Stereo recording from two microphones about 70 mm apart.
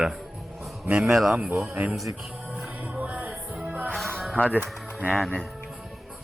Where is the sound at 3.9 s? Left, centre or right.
Centre.